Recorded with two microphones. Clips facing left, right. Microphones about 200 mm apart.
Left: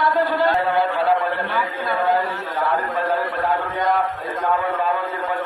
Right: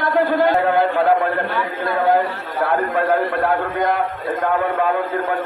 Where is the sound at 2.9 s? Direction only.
55° right (ahead or behind).